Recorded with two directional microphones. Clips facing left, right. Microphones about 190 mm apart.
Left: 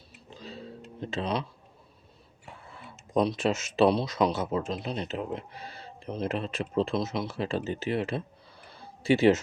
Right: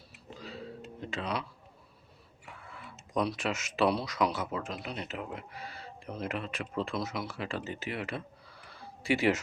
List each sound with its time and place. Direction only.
0.3 s tick-tock: 25° left (ahead or behind)
1.1 s speech: 25° left (ahead or behind)
2.5 s speech: 25° left (ahead or behind)
8.7 s a sound: 25° left (ahead or behind)